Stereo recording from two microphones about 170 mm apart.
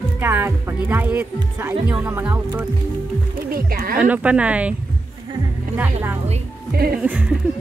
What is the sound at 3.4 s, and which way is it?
Speech, 60° right (ahead or behind).